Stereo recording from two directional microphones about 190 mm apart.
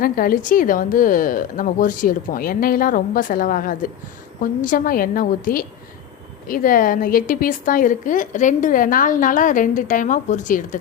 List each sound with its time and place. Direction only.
0.0 s a woman's voice: 50° left (ahead or behind)